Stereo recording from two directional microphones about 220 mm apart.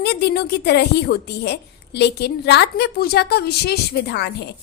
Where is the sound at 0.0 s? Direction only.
45° left (ahead or behind).